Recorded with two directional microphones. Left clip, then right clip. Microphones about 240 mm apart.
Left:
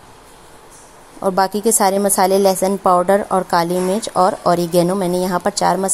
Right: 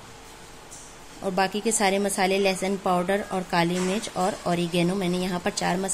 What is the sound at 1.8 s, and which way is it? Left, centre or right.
Speech, centre.